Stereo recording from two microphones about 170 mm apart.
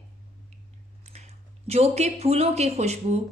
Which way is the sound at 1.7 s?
40° right (ahead or behind).